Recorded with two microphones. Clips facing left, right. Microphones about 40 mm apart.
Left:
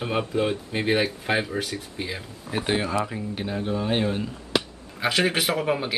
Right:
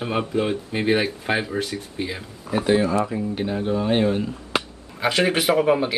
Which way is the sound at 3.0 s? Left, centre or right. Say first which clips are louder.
Right 5 dB; centre.